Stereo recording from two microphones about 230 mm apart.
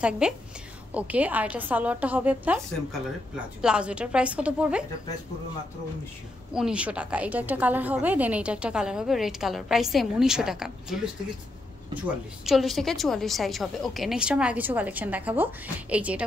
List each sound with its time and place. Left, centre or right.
0.2 s a woman's voice: centre
6.5 s a woman's voice: centre
12.4 s a woman's voice: centre